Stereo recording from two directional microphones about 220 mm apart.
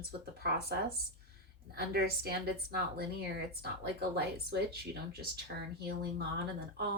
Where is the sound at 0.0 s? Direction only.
45° right (ahead or behind).